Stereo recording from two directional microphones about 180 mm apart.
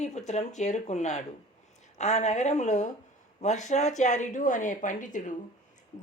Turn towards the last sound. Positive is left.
turn(degrees=45)  # may be behind; listen again after turning